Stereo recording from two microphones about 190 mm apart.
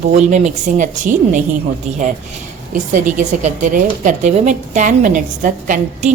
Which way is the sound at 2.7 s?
40° right (ahead or behind).